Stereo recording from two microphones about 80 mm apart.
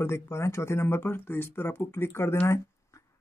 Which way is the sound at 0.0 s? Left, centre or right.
Left.